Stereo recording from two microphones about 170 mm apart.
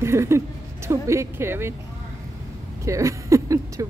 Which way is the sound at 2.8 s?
20° right (ahead or behind).